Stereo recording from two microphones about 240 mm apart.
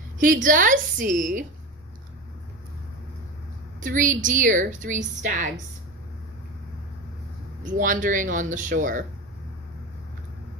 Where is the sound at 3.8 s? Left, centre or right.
Right.